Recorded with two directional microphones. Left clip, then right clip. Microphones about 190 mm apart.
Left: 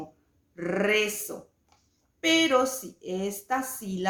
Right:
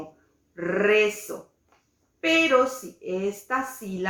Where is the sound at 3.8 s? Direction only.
5° left (ahead or behind).